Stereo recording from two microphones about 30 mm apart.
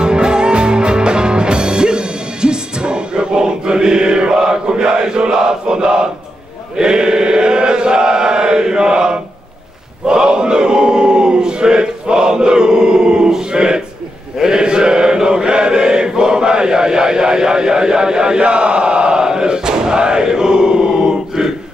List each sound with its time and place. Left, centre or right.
0.0 s music: right
6.8 s chant: right
10.0 s a sound: right
14.4 s chant: right